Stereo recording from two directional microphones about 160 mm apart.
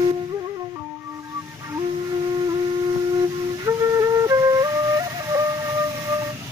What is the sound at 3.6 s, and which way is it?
Flute, 20° right (ahead or behind).